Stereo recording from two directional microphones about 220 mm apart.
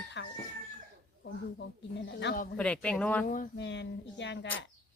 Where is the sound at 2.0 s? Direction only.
50° left (ahead or behind).